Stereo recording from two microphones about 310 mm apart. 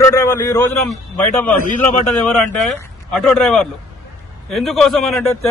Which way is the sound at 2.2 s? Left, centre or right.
Centre.